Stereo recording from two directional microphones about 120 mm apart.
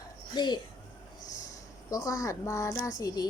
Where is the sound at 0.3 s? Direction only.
35° left (ahead or behind).